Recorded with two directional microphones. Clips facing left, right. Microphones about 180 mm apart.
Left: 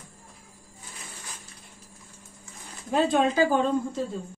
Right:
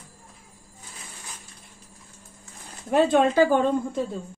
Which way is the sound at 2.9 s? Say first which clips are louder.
Right 3 dB; 60° right (ahead or behind).